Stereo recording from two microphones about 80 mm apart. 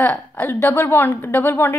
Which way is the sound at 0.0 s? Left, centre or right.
Left.